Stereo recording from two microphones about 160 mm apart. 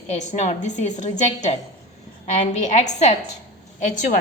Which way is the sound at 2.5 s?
45° left (ahead or behind).